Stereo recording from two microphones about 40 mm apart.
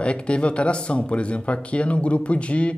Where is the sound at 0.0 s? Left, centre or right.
Left.